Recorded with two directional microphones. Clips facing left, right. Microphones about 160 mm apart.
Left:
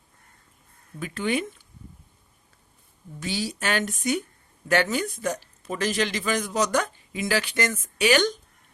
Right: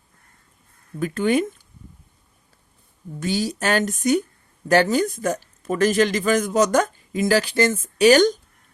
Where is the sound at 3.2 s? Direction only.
45° right (ahead or behind).